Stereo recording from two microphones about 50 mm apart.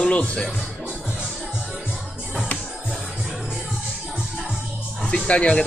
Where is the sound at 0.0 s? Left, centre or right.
Left.